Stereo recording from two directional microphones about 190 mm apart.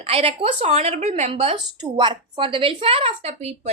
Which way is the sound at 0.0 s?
30° right (ahead or behind).